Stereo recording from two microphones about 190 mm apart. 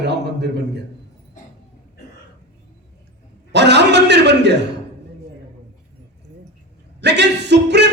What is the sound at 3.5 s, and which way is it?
A man's voice, 65° right (ahead or behind).